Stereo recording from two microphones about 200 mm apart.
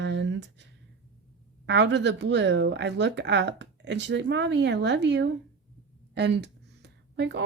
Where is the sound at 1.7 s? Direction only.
60° right (ahead or behind).